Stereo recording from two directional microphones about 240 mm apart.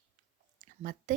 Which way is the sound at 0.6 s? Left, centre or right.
Right.